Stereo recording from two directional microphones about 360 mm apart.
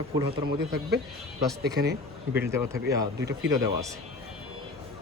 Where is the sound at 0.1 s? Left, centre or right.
Centre.